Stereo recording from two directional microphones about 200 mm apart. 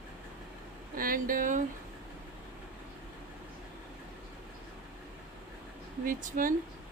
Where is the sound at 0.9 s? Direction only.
45° right (ahead or behind).